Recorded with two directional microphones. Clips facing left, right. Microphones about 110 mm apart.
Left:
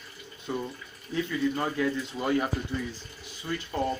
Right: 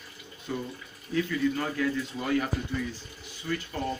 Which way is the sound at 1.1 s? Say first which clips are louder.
Right 1 dB; 20° left (ahead or behind).